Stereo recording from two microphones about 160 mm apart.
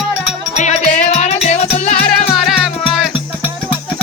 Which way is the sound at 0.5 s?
45° left (ahead or behind).